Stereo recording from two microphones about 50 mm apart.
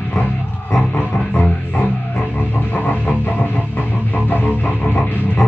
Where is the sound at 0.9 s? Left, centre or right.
Left.